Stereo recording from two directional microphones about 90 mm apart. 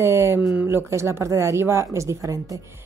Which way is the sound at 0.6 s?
25° right (ahead or behind).